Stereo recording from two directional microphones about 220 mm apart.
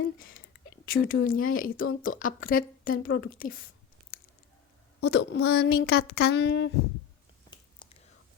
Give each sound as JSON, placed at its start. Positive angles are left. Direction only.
{"t": 0.9, "sound": "a woman's voice", "side_deg": 40}
{"t": 5.0, "sound": "speech", "side_deg": 50}
{"t": 7.5, "sound": "whispering", "side_deg": 20}